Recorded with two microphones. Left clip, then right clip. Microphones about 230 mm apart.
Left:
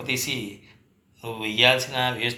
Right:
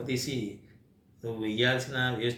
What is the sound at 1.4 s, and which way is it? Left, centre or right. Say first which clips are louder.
Speech: left 9 dB; left.